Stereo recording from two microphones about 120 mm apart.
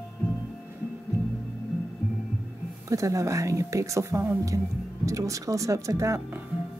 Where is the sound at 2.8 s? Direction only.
25° right (ahead or behind).